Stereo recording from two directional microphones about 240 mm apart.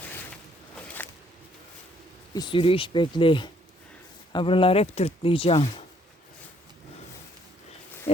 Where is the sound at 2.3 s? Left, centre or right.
Centre.